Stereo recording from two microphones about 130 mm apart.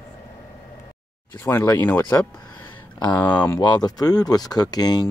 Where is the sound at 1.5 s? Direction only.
20° left (ahead or behind).